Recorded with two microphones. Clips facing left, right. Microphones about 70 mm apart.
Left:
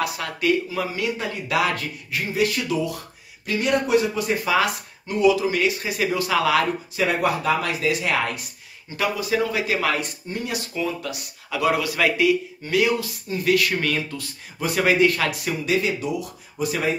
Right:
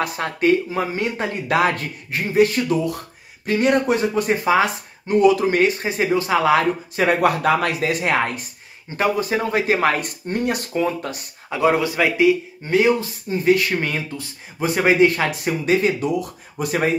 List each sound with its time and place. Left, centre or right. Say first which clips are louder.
0.0 s speech: right 4 dB; right
4.5 s speech: right 4 dB; right
5.2 s speech: right 2 dB; right
7.2 s speech: right 4 dB; right